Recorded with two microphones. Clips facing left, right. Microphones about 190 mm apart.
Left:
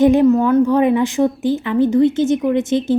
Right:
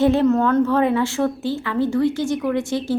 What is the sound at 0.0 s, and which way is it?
A woman's voice, 15° left (ahead or behind).